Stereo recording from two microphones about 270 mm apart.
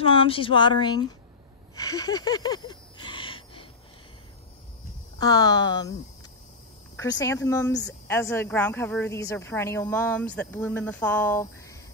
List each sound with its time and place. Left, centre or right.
0.0 s speech: centre
1.8 s a sound: centre
5.2 s a woman's voice: centre
7.0 s a woman's voice: centre